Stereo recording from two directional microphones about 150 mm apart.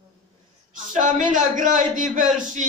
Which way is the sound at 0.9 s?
60° right (ahead or behind).